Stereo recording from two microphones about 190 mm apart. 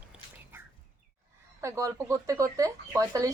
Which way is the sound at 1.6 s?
15° right (ahead or behind).